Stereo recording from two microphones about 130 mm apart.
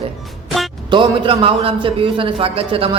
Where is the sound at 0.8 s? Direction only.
40° right (ahead or behind).